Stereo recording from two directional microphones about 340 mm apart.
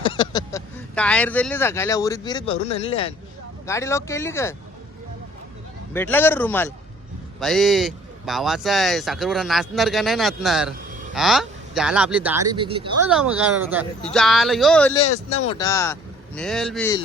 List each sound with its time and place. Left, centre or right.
0.0 s speech: centre
5.9 s speech: centre
13.1 s speech: centre
15.4 s speech: centre